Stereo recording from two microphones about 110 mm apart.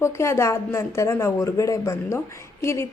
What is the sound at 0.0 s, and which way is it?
A woman's voice, 25° left (ahead or behind).